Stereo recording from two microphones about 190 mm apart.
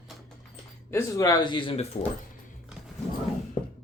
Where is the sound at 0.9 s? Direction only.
15° left (ahead or behind).